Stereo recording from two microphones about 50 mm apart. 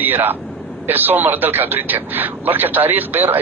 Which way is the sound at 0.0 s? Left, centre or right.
Right.